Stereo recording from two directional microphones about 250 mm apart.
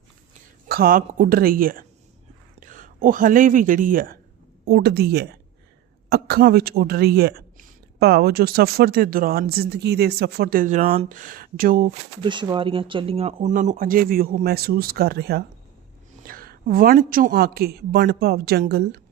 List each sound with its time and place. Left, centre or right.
0.7 s speech: right
12.2 s speech: centre; by 18.9 s right